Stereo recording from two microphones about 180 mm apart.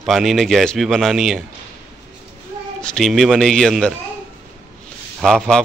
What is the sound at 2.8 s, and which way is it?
A man's voice, centre (ahead or behind).